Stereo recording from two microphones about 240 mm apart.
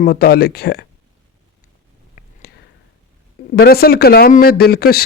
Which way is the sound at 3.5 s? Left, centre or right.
Left.